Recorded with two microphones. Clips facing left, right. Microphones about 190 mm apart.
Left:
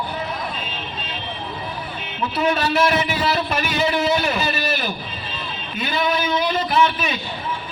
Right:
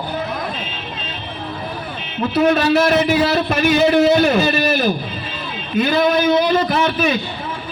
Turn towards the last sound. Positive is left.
turn(degrees=-40)  # may be behind; listen again after turning